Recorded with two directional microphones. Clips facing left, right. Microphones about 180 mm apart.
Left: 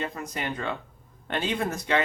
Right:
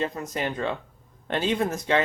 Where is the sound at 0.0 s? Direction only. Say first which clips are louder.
Right 4 dB; 25° right (ahead or behind).